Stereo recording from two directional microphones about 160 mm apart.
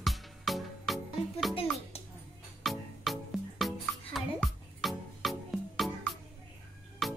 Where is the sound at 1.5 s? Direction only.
35° left (ahead or behind).